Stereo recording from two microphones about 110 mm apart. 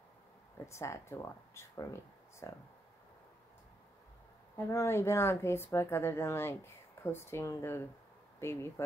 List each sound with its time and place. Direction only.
0.7 s speech: 25° left (ahead or behind)
4.6 s speech: 25° left (ahead or behind)